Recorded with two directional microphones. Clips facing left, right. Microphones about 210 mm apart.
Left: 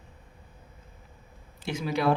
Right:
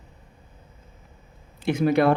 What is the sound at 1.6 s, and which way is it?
Speech, 55° right (ahead or behind).